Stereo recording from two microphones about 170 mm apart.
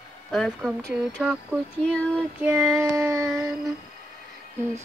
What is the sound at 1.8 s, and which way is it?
Speech, 5° left (ahead or behind).